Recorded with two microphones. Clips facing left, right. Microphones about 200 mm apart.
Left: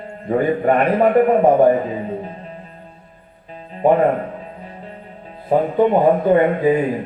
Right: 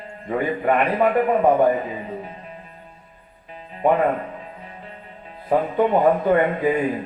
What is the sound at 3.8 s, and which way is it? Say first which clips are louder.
Speech: left 4 dB; 30° left (ahead or behind).